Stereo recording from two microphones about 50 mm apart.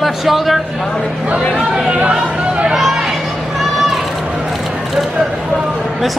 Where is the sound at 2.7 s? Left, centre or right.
Centre.